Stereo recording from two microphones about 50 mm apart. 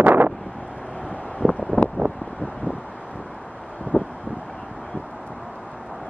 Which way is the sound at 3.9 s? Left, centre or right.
Left.